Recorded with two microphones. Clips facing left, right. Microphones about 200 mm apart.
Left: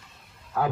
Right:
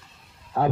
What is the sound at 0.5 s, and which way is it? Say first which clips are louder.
Speech: right 3 dB; 30° right (ahead or behind).